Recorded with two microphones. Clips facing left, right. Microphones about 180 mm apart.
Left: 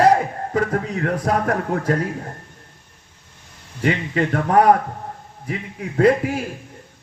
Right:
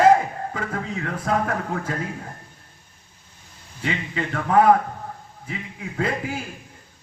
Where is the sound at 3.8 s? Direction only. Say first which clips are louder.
Left 7 dB; 45° left (ahead or behind).